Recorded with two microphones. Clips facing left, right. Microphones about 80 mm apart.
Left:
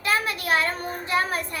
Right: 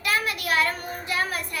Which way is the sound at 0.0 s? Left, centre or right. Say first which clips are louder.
Left 1 dB; left.